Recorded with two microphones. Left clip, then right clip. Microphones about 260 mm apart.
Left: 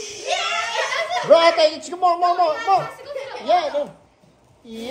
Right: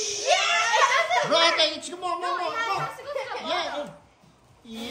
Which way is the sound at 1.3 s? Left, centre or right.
Right.